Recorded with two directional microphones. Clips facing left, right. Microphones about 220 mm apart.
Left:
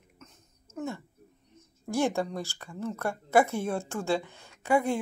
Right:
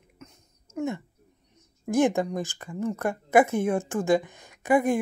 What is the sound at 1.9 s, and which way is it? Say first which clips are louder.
Speech: right 5 dB; 20° right (ahead or behind).